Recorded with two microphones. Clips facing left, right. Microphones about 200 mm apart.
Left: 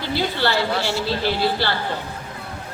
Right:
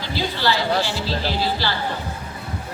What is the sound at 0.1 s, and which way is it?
Speech, 55° left (ahead or behind).